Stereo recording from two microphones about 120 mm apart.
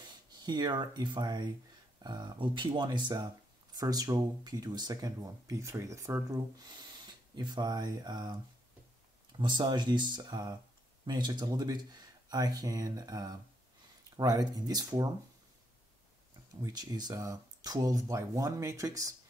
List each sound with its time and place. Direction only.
0.0 s speech: 35° right (ahead or behind)
9.4 s speech: 40° right (ahead or behind)
16.6 s speech: 30° right (ahead or behind)